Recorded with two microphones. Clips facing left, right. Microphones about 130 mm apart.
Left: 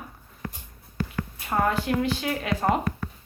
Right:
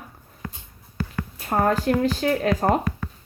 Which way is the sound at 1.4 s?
40° right (ahead or behind).